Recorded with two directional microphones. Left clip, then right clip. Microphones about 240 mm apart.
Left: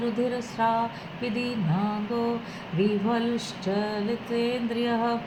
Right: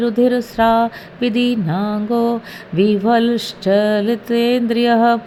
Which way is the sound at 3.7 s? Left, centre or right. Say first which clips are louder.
Right 14 dB; right.